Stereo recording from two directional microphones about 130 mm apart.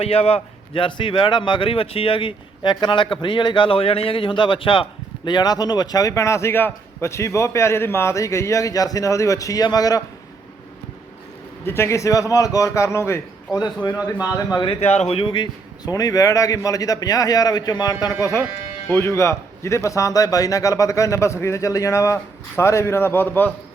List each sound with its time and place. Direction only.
0.0 s a man's voice: 50° left (ahead or behind); by 10.0 s 30° left (ahead or behind)
11.6 s a man's voice: 20° left (ahead or behind)
14.8 s a man's voice: 55° left (ahead or behind); by 23.6 s 15° left (ahead or behind)